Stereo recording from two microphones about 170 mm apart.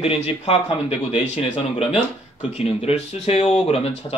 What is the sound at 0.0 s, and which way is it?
Speech, 35° left (ahead or behind).